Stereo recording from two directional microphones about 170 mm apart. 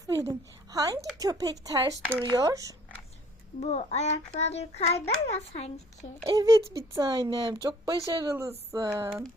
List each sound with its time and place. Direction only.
0.3 s speech: 20° right (ahead or behind)
3.6 s child singing: 40° left (ahead or behind)
6.2 s speech: 20° right (ahead or behind)